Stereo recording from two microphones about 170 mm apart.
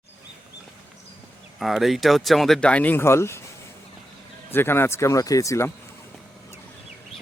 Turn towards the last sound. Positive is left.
turn(degrees=15)  # may be behind; listen again after turning